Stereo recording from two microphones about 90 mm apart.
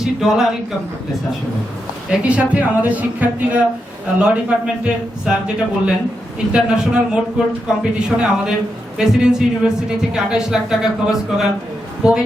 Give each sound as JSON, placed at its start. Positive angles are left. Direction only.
{"t": 0.0, "sound": "speech", "side_deg": -5}
{"t": 2.0, "sound": "speech", "side_deg": -15}
{"t": 6.5, "sound": "speech", "side_deg": -10}